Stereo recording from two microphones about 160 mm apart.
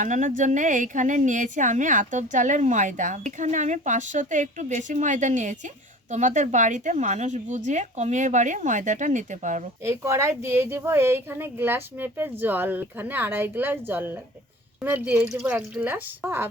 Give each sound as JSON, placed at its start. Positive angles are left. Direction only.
{"t": 0.0, "sound": "a woman's voice", "side_deg": -50}
{"t": 9.8, "sound": "speech", "side_deg": -15}